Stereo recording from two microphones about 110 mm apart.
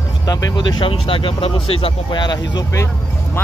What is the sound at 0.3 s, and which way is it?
Speech, 35° left (ahead or behind).